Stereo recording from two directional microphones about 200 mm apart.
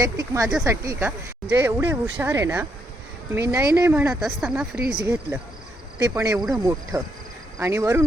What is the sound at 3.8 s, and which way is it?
Speech, 10° right (ahead or behind).